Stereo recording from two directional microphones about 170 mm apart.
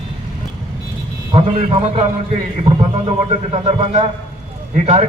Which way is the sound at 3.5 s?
35° right (ahead or behind).